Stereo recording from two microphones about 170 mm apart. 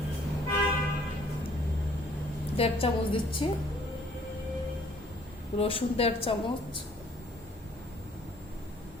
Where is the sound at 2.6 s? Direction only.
35° left (ahead or behind).